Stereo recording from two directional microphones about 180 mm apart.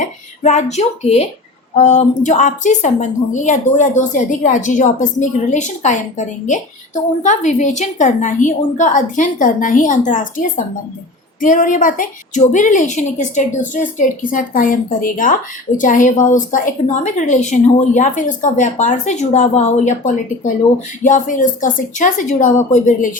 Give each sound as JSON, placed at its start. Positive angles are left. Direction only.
{"t": 0.0, "sound": "a woman's voice", "side_deg": 40}
{"t": 21.0, "sound": "a woman's voice", "side_deg": 45}